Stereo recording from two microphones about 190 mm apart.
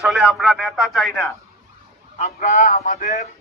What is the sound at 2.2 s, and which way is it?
Speech, 40° left (ahead or behind).